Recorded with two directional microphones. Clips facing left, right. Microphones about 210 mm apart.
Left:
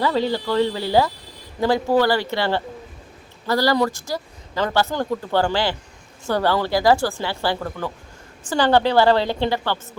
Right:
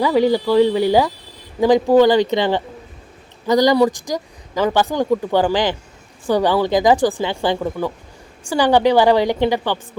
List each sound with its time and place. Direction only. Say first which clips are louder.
0.0 s speech: right 6 dB; 15° right (ahead or behind)